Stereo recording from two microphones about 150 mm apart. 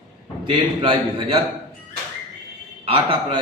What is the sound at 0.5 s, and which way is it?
Speech, 35° right (ahead or behind).